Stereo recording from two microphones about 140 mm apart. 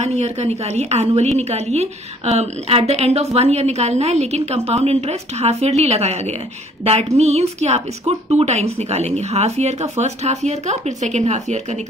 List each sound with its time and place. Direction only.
0.0 s a woman's voice: 50° right (ahead or behind)